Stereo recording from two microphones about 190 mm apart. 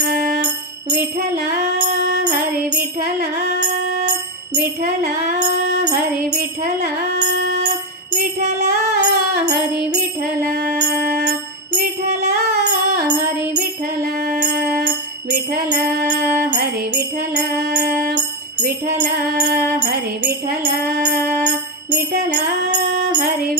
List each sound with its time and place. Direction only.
0.0 s music: 55° right (ahead or behind)
6.3 s music: 55° right (ahead or behind)
10.5 s music: 55° right (ahead or behind)
14.3 s music: 45° right (ahead or behind)
14.9 s music: 65° right (ahead or behind)
19.7 s music: 60° right (ahead or behind)
22.7 s music: 35° right (ahead or behind)